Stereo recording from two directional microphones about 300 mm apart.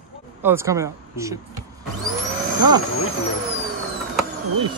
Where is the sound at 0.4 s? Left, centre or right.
Centre.